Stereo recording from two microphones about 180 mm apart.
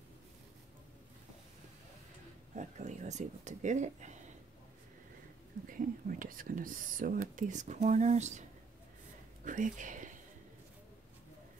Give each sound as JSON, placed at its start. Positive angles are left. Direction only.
{"t": 2.5, "sound": "speech", "side_deg": -40}
{"t": 5.7, "sound": "speech", "side_deg": -50}